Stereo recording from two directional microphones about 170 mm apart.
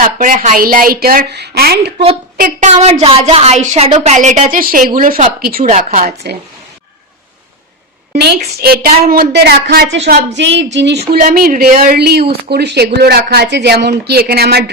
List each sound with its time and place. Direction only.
0.2 s a woman's voice: 50° right (ahead or behind); by 2.0 s 70° right (ahead or behind)
2.4 s a woman's voice: 45° right (ahead or behind)
5.6 s a woman's voice: 45° right (ahead or behind)
8.1 s a woman's voice: 75° right (ahead or behind)
8.6 s a woman's voice: 60° right (ahead or behind)
9.3 s a woman's voice: 75° right (ahead or behind)